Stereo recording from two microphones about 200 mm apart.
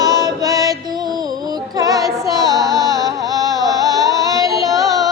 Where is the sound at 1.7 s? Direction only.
20° right (ahead or behind).